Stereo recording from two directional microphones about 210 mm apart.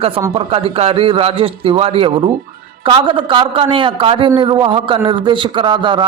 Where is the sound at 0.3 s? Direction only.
25° right (ahead or behind).